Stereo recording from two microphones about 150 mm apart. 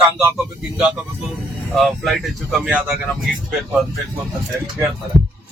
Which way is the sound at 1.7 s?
Centre (ahead or behind).